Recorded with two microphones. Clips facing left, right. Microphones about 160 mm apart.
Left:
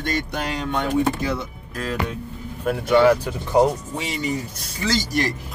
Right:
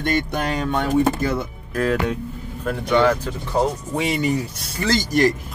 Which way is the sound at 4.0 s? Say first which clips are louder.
Right 5 dB; 55° right (ahead or behind).